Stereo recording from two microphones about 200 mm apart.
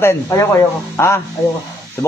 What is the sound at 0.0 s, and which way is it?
A man's voice, 15° left (ahead or behind).